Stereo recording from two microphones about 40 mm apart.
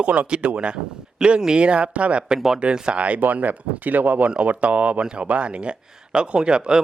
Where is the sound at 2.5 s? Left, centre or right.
Right.